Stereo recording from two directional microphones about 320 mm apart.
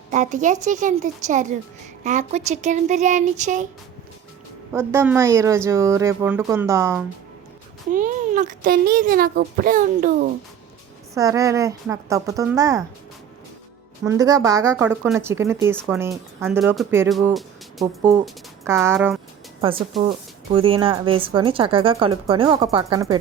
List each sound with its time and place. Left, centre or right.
0.1 s a child's voice: right
4.7 s speech: centre
7.9 s a child's voice: right
11.1 s speech: centre
14.0 s speech: centre
20.0 s speech: centre